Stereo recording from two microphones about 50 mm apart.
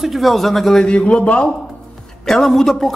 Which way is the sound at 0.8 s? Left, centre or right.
Left.